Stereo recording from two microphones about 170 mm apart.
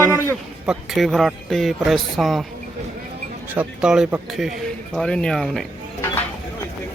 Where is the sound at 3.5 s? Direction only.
5° right (ahead or behind).